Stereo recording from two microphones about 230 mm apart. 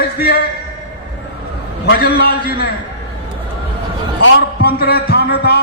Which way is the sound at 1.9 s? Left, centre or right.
Left.